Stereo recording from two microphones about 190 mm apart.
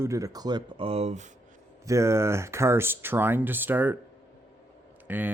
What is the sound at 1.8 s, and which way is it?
Speech, 15° right (ahead or behind).